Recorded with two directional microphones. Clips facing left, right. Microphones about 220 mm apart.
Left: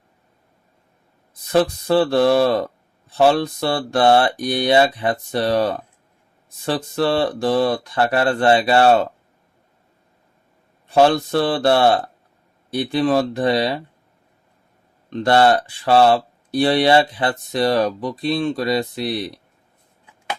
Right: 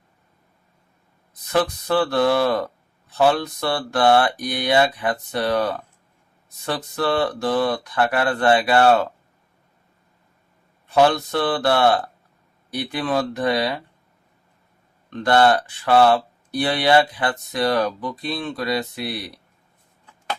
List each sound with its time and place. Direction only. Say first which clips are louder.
1.5 s speech: left 4 dB; 30° left (ahead or behind)
10.9 s speech: left 3 dB; 30° left (ahead or behind)
15.1 s speech: left 2 dB; 25° left (ahead or behind)